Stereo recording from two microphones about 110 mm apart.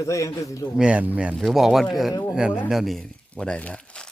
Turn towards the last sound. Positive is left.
turn(degrees=10)  # may be behind; listen again after turning